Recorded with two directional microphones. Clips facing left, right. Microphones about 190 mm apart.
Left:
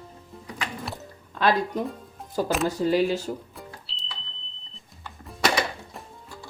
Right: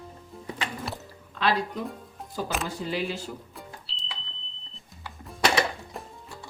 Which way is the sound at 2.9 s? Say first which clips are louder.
Left 8 dB; 40° left (ahead or behind).